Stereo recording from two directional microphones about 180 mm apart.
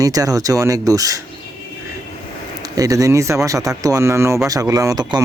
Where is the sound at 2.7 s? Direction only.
20° right (ahead or behind).